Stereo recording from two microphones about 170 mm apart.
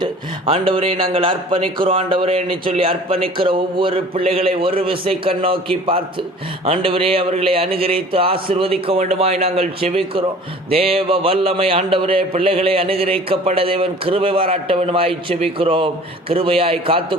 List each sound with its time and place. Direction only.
0.0 s a man's voice: 30° right (ahead or behind)